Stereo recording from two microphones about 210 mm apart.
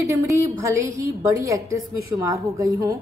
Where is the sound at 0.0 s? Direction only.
15° right (ahead or behind).